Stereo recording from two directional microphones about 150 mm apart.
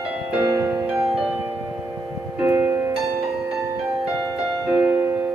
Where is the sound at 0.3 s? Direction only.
10° right (ahead or behind).